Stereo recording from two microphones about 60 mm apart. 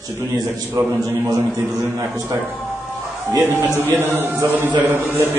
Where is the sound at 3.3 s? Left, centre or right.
Right.